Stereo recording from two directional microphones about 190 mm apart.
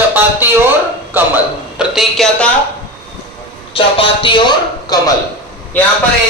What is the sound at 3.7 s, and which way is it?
Speech, 30° left (ahead or behind).